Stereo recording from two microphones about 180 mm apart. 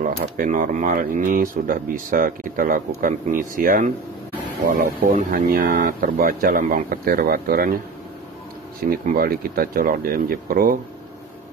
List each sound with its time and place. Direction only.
0.0 s a man's voice: 50° right (ahead or behind)
8.9 s speech: 55° right (ahead or behind)